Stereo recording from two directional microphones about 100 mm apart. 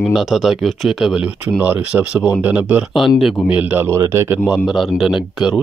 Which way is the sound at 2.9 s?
Centre (ahead or behind).